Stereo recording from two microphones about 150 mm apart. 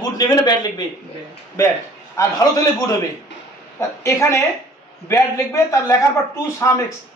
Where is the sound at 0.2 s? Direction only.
25° left (ahead or behind).